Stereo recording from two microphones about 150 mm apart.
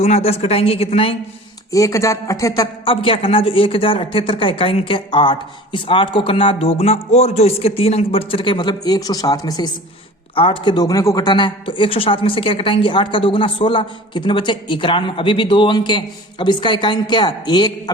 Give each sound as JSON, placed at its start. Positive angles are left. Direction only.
{"t": 0.0, "sound": "speech", "side_deg": 45}
{"t": 1.7, "sound": "speech", "side_deg": 20}
{"t": 2.8, "sound": "speech", "side_deg": 35}